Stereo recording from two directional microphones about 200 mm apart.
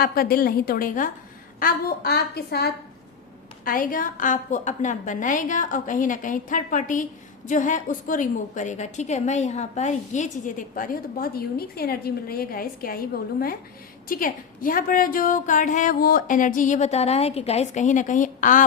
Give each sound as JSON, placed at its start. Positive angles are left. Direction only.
{"t": 0.0, "sound": "a woman's voice", "side_deg": 50}
{"t": 14.1, "sound": "a woman's voice", "side_deg": 45}